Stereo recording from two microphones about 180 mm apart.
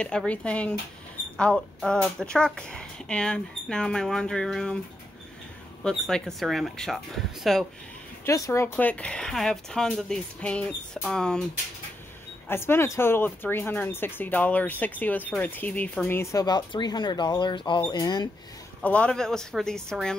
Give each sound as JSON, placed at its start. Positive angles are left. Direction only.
{"t": 0.0, "sound": "speech", "side_deg": 5}
{"t": 5.9, "sound": "speech", "side_deg": 5}
{"t": 8.3, "sound": "speech", "side_deg": 15}
{"t": 12.4, "sound": "speech", "side_deg": 15}
{"t": 18.8, "sound": "speech", "side_deg": 5}